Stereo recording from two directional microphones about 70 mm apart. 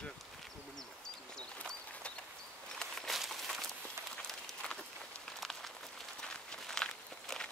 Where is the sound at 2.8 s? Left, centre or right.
Centre.